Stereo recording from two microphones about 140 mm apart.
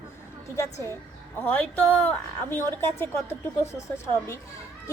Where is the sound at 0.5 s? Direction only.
20° left (ahead or behind).